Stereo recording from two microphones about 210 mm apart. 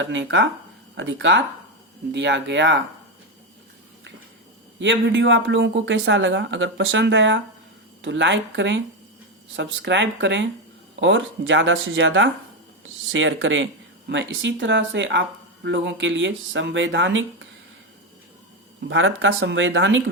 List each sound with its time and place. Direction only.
0.0 s speech: 60° right (ahead or behind)
4.8 s speech: 60° right (ahead or behind)
18.9 s speech: 65° right (ahead or behind)